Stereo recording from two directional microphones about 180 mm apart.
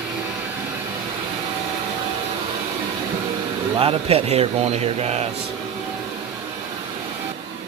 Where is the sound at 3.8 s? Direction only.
30° right (ahead or behind).